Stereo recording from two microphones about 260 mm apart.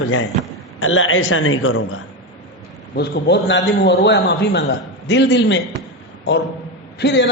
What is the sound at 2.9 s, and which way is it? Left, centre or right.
A man's voice, left.